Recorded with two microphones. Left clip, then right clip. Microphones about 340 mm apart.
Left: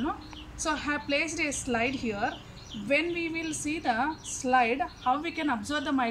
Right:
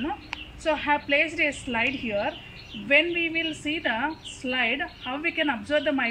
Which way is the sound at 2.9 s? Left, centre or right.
Left.